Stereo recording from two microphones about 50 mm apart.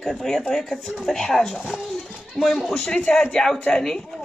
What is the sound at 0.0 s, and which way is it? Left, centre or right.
Speech, centre.